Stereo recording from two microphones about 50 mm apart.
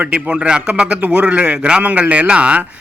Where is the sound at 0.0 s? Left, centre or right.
Right.